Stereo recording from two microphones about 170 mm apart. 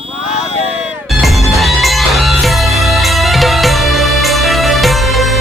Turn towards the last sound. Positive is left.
turn(degrees=0)  # may be behind; listen again after turning